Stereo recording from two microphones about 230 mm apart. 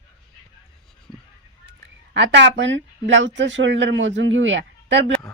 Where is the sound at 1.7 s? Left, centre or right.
Right.